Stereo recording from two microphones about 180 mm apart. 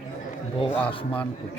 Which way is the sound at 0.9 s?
30° left (ahead or behind).